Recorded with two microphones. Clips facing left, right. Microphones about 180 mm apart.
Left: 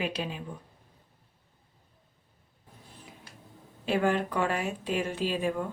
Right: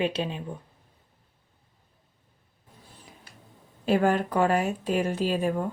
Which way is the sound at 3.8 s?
40° right (ahead or behind).